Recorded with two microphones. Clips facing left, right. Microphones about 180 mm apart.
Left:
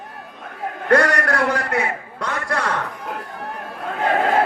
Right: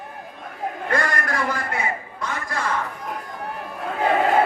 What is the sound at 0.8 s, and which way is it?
A man's voice, 75° left (ahead or behind).